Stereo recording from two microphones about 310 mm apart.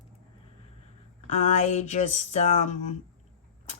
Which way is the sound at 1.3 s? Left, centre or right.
Left.